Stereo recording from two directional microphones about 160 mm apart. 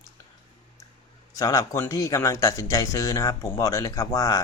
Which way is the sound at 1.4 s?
20° left (ahead or behind).